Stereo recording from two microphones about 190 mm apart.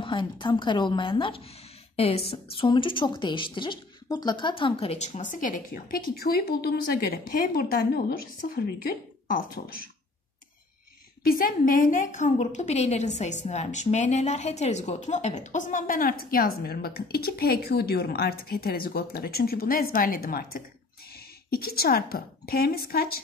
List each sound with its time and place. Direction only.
0.0 s a woman's voice: 25° left (ahead or behind); by 9.8 s 50° left (ahead or behind)
11.2 s a woman's voice: 50° left (ahead or behind)